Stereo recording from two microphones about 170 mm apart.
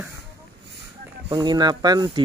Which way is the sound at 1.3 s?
25° right (ahead or behind).